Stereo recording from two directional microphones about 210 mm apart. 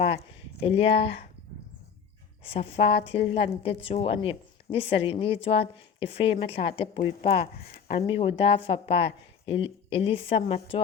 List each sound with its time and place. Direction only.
0.6 s a woman's voice: 25° left (ahead or behind)
2.4 s a woman's voice: 25° left (ahead or behind)